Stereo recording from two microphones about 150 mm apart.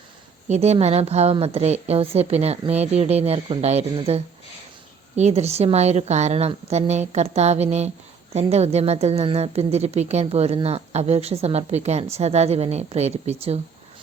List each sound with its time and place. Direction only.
0.4 s a woman's voice: 45° right (ahead or behind)